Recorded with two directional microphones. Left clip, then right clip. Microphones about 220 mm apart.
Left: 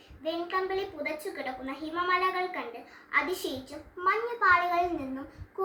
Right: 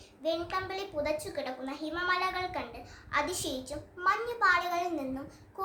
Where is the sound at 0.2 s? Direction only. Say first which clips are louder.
Left 1 dB; 15° right (ahead or behind).